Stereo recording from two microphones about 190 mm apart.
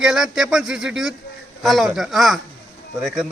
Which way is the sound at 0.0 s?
Centre (ahead or behind).